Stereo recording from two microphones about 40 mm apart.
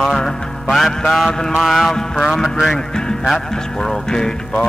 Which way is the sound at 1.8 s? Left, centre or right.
Centre.